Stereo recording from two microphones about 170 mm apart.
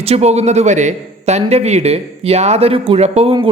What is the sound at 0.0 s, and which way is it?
A man's voice, 40° right (ahead or behind).